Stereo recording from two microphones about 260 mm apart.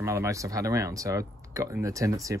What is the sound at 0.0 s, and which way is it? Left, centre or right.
Speech, centre.